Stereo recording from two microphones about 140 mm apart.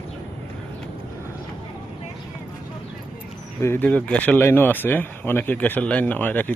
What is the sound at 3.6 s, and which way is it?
Speech, 20° left (ahead or behind).